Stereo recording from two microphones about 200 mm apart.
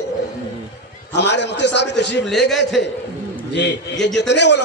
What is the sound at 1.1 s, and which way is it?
A man's voice, 60° left (ahead or behind).